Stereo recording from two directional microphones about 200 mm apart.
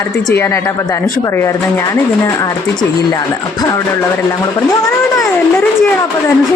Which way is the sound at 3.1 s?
20° left (ahead or behind).